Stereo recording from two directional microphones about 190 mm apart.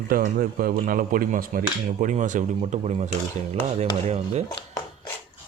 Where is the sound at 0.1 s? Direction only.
50° right (ahead or behind).